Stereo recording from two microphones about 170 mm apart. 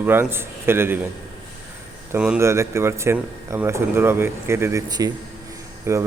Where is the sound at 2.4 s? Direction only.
15° right (ahead or behind).